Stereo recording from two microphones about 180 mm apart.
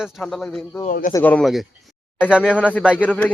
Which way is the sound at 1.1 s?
10° left (ahead or behind).